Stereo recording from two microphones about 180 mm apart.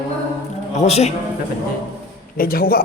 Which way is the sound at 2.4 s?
55° left (ahead or behind).